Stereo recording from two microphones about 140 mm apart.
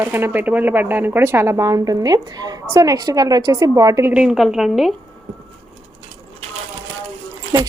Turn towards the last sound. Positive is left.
turn(degrees=-30)  # may be behind; listen again after turning